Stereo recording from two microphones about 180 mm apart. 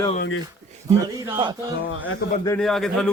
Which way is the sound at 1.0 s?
20° right (ahead or behind).